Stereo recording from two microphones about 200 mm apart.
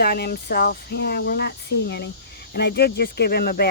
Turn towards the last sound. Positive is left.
turn(degrees=50)  # may be behind; listen again after turning